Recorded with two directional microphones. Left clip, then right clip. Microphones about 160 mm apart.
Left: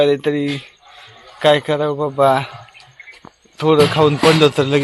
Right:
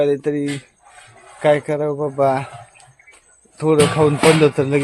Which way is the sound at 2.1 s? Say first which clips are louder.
Left 4 dB; centre (ahead or behind).